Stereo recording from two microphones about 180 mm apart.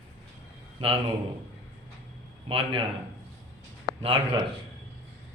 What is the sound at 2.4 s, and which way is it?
Speech, 30° right (ahead or behind).